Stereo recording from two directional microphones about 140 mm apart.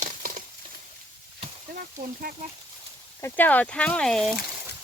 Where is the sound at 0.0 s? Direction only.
70° right (ahead or behind).